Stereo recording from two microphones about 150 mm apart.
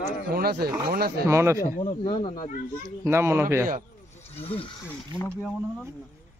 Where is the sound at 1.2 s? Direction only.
20° right (ahead or behind).